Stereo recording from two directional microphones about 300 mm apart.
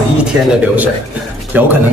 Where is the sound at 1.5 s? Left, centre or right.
Centre.